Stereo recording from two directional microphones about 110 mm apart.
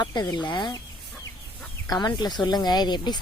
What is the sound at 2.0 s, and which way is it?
Speech, 40° left (ahead or behind).